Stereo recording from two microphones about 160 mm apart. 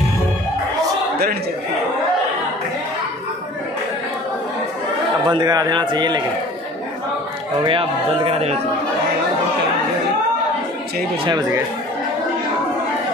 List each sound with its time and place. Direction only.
5.3 s a man's voice: 25° right (ahead or behind)
7.6 s a man's voice: 35° right (ahead or behind)
11.2 s a man's voice: 25° right (ahead or behind)